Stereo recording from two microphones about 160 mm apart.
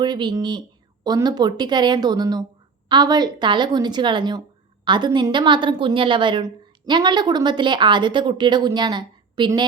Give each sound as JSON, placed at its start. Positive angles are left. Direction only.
{"t": 0.0, "sound": "a woman's voice", "side_deg": -30}